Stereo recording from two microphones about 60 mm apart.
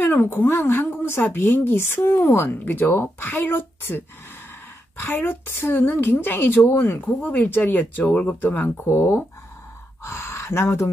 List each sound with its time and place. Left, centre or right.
0.0 s a woman's voice: left
8.8 s speech: left